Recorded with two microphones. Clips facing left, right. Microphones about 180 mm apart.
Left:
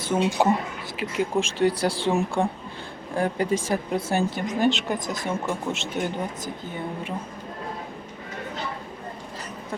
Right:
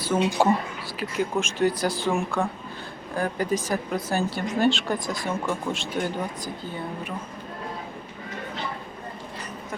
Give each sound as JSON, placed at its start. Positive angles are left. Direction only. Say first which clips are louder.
{"t": 0.0, "sound": "speech", "louder": "even", "side_deg": 15}
{"t": 0.9, "sound": "speech", "louder": "left 2 dB", "side_deg": 30}